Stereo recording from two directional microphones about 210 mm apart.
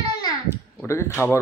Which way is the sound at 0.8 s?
10° left (ahead or behind).